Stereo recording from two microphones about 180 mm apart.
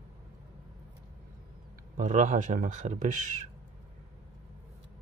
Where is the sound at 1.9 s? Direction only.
45° right (ahead or behind).